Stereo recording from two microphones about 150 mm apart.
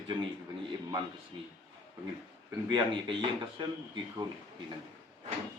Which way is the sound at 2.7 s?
30° right (ahead or behind).